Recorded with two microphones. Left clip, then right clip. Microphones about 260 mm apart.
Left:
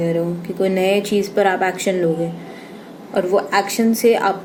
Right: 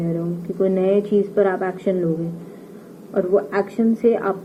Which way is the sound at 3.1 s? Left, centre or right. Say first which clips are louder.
Left 2 dB; left.